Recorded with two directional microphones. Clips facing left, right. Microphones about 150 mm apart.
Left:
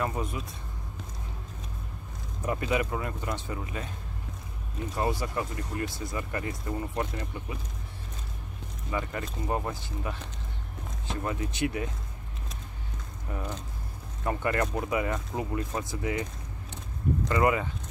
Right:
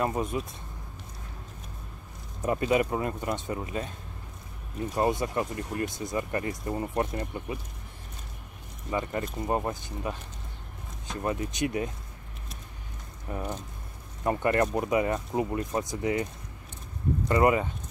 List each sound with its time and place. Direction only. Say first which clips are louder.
0.0 s speech: right 3 dB; 20° right (ahead or behind)
2.4 s speech: right 4 dB; 30° right (ahead or behind)
4.9 s speech: right 3 dB; 25° right (ahead or behind)
8.9 s speech: right 3 dB; 25° right (ahead or behind)
11.2 s speech: right 2 dB; 25° right (ahead or behind)
14.2 s speech: right 3 dB; 25° right (ahead or behind)
17.3 s speech: right 3 dB; 25° right (ahead or behind)